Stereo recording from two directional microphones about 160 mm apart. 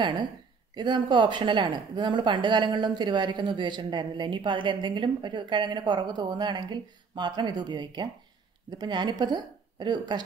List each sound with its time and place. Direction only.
0.0 s speech: 30° right (ahead or behind)